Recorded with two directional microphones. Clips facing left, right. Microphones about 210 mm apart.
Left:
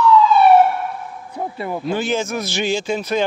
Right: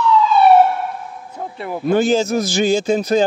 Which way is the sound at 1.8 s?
45° right (ahead or behind).